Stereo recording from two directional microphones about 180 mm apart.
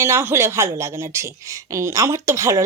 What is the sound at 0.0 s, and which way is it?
Speech, 15° right (ahead or behind).